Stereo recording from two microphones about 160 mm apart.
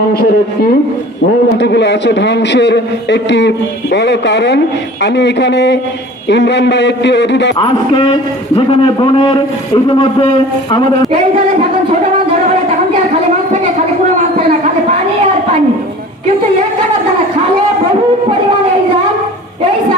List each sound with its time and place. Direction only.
0.1 s speech: 80° left
1.5 s a man's voice: 90° left
7.6 s a man's voice: 35° left (ahead or behind)
14.6 s a sound: 50° right (ahead or behind)